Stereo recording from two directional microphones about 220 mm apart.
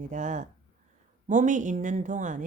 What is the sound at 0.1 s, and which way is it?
Speech, 35° right (ahead or behind).